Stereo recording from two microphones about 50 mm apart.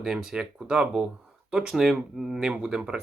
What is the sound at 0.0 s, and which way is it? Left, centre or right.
Speech, centre.